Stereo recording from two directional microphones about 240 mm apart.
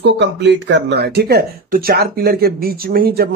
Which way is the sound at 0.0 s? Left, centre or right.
Right.